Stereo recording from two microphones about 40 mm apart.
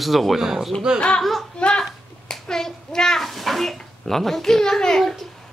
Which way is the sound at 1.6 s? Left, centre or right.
Left.